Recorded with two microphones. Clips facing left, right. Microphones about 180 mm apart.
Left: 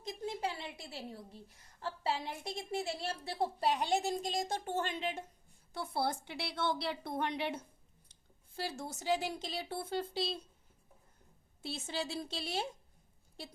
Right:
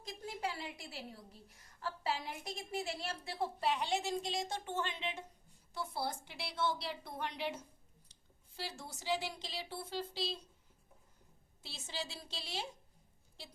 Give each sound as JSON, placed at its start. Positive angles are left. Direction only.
{"t": 0.0, "sound": "a woman's voice", "side_deg": 25}
{"t": 5.7, "sound": "a woman's voice", "side_deg": 60}
{"t": 11.6, "sound": "a woman's voice", "side_deg": 55}